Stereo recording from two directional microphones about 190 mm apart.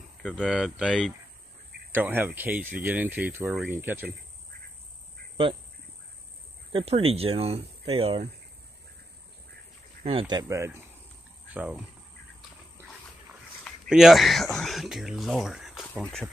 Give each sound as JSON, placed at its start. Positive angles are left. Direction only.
{"t": 0.2, "sound": "speech", "side_deg": 5}
{"t": 6.7, "sound": "speech", "side_deg": -30}
{"t": 10.0, "sound": "speech", "side_deg": -25}
{"t": 13.7, "sound": "speech", "side_deg": 0}